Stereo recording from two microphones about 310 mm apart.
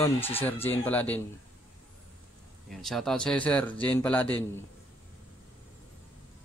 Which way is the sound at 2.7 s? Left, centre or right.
Centre.